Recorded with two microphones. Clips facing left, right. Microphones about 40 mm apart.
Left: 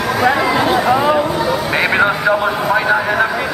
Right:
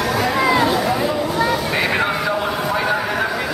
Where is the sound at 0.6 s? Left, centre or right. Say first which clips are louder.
Left 5 dB; left.